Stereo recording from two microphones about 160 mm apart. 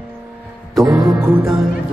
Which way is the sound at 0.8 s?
25° right (ahead or behind).